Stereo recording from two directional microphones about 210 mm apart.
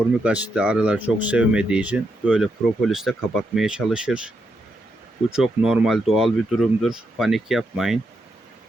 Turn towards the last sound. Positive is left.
turn(degrees=0)  # may be behind; listen again after turning